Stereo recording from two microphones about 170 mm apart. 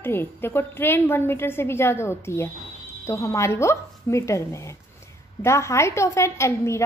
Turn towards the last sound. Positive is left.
turn(degrees=15)  # may be behind; listen again after turning